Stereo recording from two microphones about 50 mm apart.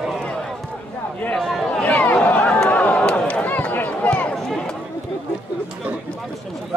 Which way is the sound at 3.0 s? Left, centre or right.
Centre.